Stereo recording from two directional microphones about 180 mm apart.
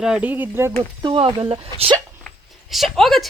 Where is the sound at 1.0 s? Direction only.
30° right (ahead or behind).